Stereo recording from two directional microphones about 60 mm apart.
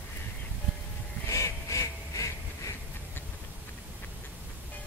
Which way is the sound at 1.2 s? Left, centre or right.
Left.